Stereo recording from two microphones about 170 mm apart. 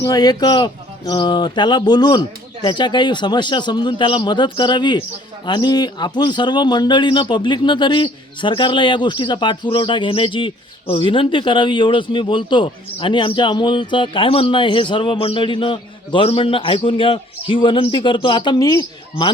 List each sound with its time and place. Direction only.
0.0 s speech: 20° left (ahead or behind)